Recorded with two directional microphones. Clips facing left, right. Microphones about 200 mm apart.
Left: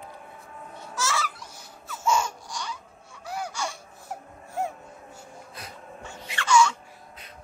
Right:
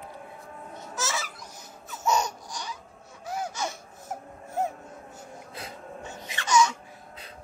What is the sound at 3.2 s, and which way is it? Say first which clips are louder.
Baby cry: right 1 dB; 20° right (ahead or behind).